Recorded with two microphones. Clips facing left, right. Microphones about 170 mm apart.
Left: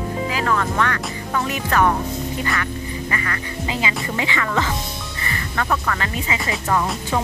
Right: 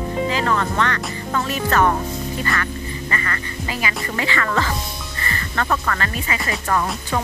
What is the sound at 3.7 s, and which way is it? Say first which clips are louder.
Speech: left 1 dB; 20° left (ahead or behind).